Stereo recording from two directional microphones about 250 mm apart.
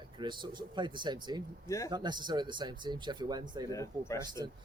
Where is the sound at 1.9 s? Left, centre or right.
Centre.